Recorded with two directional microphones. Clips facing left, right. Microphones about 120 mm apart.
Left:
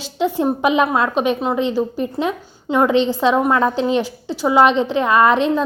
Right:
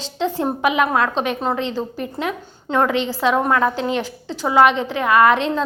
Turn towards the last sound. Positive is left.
turn(degrees=15)  # may be behind; listen again after turning